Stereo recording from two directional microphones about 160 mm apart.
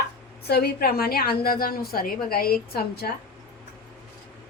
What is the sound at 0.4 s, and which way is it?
A woman's voice, 85° left.